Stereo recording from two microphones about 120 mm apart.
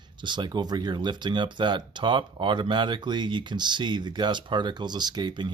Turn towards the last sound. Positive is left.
turn(degrees=-40)  # may be behind; listen again after turning